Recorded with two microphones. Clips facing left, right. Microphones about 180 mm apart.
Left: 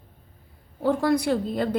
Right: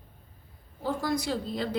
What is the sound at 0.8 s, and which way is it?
Speech, 60° left (ahead or behind).